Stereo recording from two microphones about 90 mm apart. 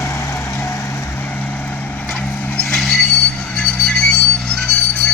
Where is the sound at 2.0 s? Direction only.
15° left (ahead or behind).